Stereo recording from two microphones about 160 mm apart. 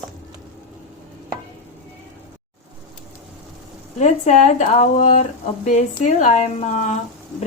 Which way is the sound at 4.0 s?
50° left (ahead or behind).